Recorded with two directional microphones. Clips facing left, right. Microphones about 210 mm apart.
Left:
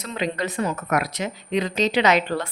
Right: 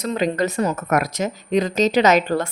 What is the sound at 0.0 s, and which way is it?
A woman's voice, 45° right (ahead or behind).